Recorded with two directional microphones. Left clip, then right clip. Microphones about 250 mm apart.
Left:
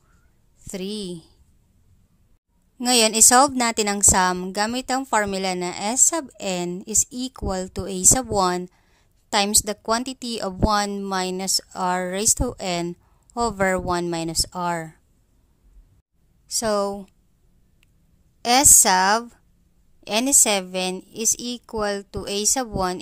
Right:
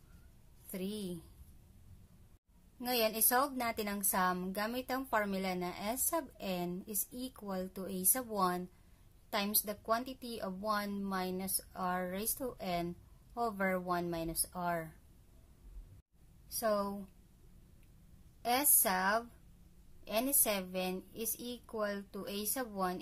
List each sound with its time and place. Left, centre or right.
0.7 s a woman's voice: left
2.8 s a woman's voice: left
16.4 s speech: left
18.4 s a woman's voice: left